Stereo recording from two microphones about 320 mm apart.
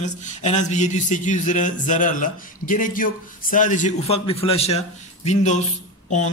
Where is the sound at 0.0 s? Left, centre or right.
Left.